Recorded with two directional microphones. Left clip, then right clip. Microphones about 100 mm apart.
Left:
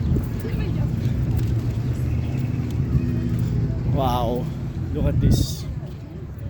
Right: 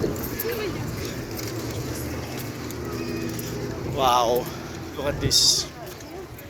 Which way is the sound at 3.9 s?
45° left (ahead or behind).